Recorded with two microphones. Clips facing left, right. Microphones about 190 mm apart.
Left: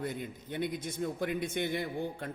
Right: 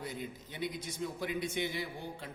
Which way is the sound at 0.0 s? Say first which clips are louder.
Left 4 dB; 55° left (ahead or behind).